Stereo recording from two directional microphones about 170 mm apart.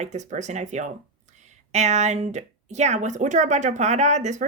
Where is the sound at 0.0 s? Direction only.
45° right (ahead or behind).